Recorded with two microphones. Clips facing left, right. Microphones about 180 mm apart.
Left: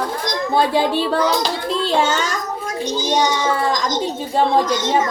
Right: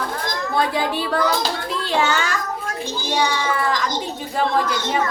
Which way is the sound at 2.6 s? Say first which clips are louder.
Left 5 dB; 20° left (ahead or behind).